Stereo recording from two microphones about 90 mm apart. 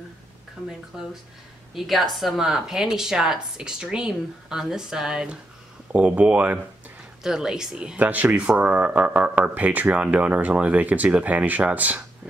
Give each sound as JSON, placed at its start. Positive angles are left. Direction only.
{"t": 0.6, "sound": "a woman's voice", "side_deg": 5}
{"t": 0.9, "sound": "a woman's voice", "side_deg": -5}